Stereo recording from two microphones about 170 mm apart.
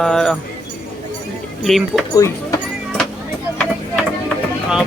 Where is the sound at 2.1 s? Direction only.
20° left (ahead or behind).